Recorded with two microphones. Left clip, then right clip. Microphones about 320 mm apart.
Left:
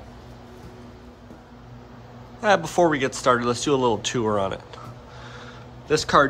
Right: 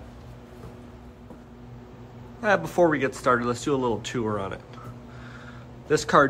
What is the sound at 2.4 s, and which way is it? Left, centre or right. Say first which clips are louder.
Speech: left 2 dB; centre.